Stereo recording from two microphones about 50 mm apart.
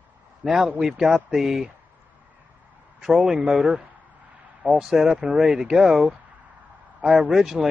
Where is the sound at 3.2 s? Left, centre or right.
Centre.